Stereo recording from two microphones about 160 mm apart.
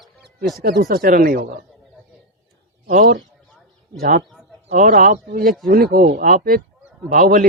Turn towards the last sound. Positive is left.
turn(degrees=-55)  # may be behind; listen again after turning